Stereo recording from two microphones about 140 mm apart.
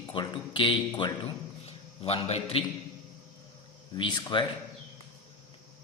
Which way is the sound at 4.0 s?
35° left (ahead or behind).